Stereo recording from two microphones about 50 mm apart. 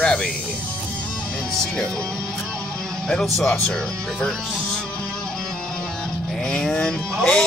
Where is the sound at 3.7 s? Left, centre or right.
Centre.